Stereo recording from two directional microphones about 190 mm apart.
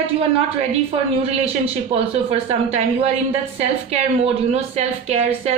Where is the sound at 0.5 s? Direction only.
35° right (ahead or behind).